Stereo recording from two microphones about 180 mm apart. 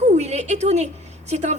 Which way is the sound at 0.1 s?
40° right (ahead or behind).